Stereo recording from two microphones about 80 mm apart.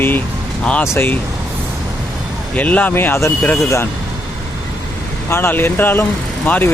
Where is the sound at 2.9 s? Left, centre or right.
Left.